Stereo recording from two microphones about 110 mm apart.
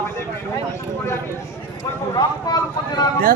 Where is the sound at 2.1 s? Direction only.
35° left (ahead or behind).